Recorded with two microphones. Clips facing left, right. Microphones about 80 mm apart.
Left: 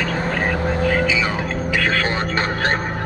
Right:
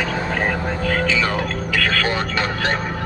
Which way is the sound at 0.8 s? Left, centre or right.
Centre.